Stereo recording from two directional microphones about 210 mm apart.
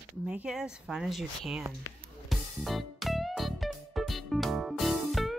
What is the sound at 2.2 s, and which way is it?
Music, centre (ahead or behind).